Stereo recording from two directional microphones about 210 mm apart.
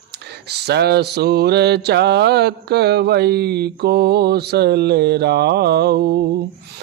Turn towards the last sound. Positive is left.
turn(degrees=-50)  # may be behind; listen again after turning